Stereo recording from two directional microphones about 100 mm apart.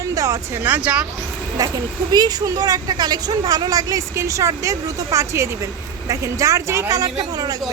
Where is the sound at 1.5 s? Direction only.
40° right (ahead or behind).